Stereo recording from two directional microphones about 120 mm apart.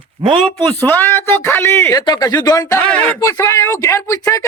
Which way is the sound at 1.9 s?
35° left (ahead or behind).